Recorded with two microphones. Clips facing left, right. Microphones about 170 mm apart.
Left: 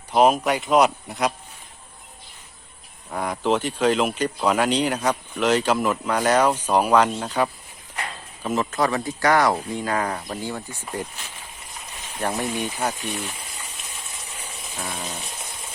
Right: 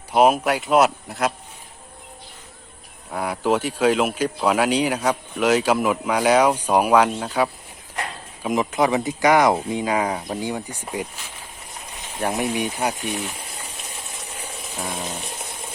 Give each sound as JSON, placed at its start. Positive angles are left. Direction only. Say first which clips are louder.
{"t": 0.1, "sound": "speech", "louder": "right 1 dB", "side_deg": -5}
{"t": 3.1, "sound": "speech", "louder": "right 1 dB", "side_deg": -5}
{"t": 12.2, "sound": "speech", "louder": "right 3 dB", "side_deg": -15}
{"t": 14.8, "sound": "a sound", "louder": "right 3 dB", "side_deg": -10}